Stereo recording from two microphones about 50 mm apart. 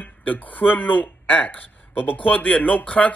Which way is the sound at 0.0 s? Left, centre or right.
Left.